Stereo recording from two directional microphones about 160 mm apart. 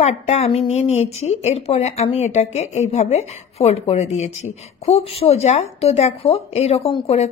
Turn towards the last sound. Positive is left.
turn(degrees=40)  # may be behind; listen again after turning